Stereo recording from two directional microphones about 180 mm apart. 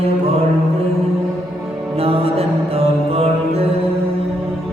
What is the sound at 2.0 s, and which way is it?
Mantra, 35° right (ahead or behind).